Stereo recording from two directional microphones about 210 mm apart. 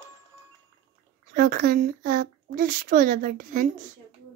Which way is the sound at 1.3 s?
40° right (ahead or behind).